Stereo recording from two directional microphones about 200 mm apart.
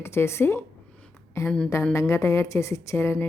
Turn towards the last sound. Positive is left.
turn(degrees=10)  # may be behind; listen again after turning